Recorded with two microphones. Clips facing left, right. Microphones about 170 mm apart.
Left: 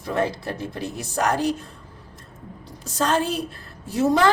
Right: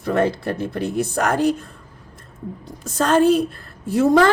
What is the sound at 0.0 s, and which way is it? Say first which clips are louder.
A woman's voice: right 5 dB; 60° right (ahead or behind).